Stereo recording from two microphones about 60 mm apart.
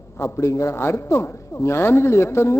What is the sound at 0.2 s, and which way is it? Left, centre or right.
A man's voice, left.